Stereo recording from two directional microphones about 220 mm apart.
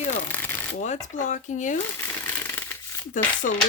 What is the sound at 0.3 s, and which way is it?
Shuffling cards, 10° left (ahead or behind).